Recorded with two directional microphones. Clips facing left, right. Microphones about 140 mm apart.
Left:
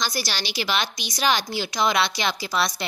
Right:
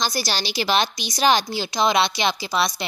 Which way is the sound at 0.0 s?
35° right (ahead or behind).